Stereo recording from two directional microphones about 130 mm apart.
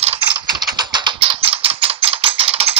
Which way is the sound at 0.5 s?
35° right (ahead or behind).